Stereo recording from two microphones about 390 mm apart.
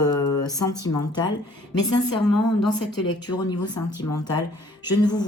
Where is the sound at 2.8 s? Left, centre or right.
Left.